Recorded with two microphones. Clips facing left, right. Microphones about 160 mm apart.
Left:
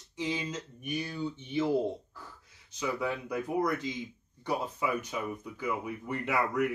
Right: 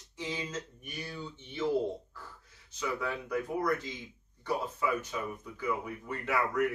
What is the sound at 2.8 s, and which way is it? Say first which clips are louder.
Speech: left 2 dB; 15° left (ahead or behind).